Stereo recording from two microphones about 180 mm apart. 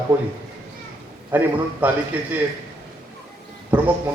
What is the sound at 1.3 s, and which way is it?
A man's voice, 10° right (ahead or behind).